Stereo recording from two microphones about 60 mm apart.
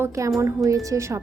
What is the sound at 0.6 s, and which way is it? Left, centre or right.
Speech, right.